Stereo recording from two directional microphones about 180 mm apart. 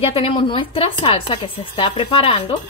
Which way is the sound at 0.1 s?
30° left (ahead or behind).